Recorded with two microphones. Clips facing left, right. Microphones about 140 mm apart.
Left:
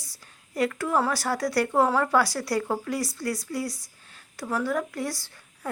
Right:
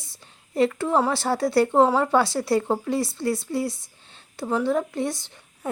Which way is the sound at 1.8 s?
15° right (ahead or behind).